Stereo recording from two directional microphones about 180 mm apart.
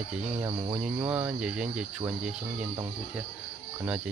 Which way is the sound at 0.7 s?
10° right (ahead or behind).